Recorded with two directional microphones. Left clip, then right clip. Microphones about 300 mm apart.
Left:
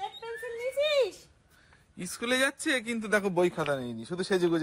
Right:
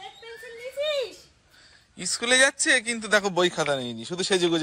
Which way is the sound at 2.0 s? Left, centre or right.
Centre.